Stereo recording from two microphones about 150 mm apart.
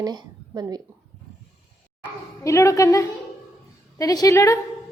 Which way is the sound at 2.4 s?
20° left (ahead or behind).